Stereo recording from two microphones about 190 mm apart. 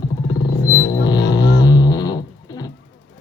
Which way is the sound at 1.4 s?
65° left (ahead or behind).